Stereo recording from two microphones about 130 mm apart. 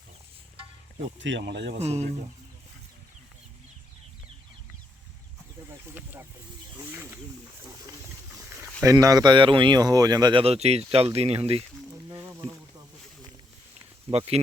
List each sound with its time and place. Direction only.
1.8 s speech: 55° right (ahead or behind)
6.7 s speech: 20° right (ahead or behind)
8.8 s speech: 25° right (ahead or behind)
10.4 s speech: 55° right (ahead or behind)
12.3 s bee: 20° right (ahead or behind)
14.1 s speech: 50° right (ahead or behind)